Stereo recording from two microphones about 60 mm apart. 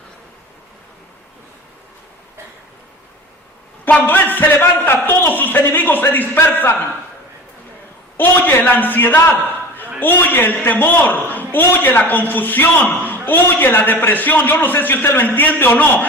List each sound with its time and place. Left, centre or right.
3.8 s a man's voice: left
8.1 s a man's voice: left